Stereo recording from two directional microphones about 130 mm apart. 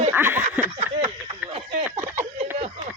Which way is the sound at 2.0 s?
20° right (ahead or behind).